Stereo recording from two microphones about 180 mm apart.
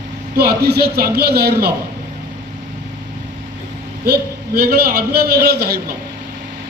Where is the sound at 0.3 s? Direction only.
60° right (ahead or behind).